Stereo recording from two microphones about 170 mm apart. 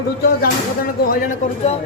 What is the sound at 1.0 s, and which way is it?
Speech, 50° left (ahead or behind).